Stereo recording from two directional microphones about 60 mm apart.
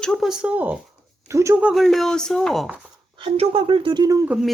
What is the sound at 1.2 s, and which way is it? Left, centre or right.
Speech, right.